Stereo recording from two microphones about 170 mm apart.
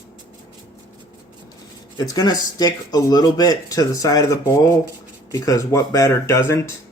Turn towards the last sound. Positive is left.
turn(degrees=15)  # may be behind; listen again after turning